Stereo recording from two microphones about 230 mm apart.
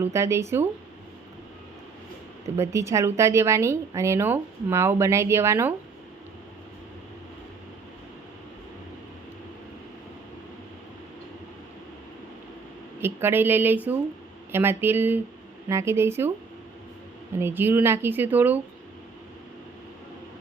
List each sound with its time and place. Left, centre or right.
0.0 s a woman's voice: centre
2.6 s a woman's voice: centre
13.0 s a woman's voice: centre
17.3 s a woman's voice: centre